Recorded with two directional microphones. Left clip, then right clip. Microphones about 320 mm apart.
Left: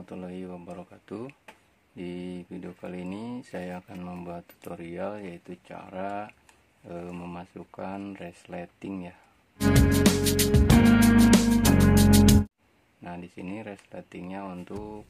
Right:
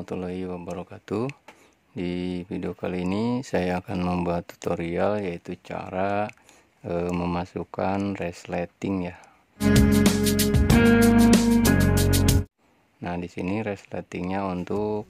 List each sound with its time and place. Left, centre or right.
0.0 s speech: right
9.6 s music: centre
13.0 s speech: right